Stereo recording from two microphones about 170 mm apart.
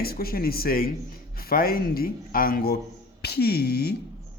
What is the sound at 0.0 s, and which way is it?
Speech, 60° left (ahead or behind).